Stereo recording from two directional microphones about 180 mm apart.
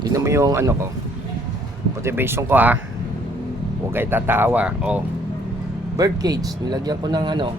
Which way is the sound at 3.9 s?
10° right (ahead or behind).